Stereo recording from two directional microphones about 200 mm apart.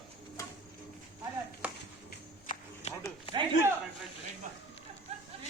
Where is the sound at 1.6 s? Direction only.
5° right (ahead or behind).